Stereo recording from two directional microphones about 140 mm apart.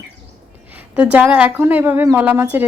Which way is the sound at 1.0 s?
10° right (ahead or behind).